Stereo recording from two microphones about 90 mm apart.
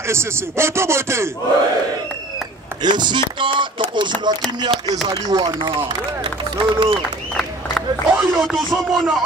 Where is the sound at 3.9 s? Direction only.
55° right (ahead or behind).